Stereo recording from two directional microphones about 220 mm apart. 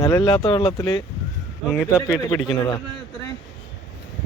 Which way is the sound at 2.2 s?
20° left (ahead or behind).